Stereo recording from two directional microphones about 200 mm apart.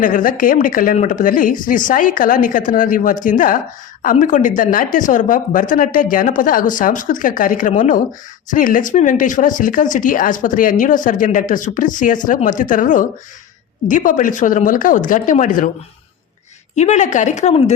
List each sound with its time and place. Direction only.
0.0 s speech: 40° left (ahead or behind)
16.7 s speech: 35° left (ahead or behind)